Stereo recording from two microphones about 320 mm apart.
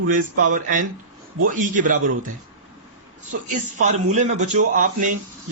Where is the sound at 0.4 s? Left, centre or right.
Right.